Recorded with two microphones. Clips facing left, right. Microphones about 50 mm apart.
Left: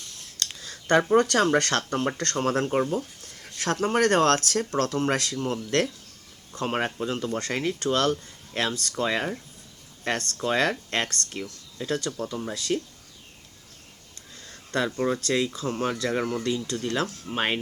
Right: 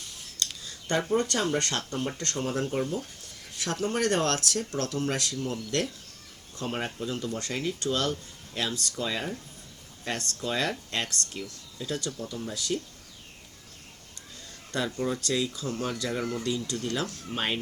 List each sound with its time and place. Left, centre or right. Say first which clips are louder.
0.3 s a sound: left 1 dB; left
1.1 s speech: left 5 dB; left
14.8 s speech: left 3 dB; left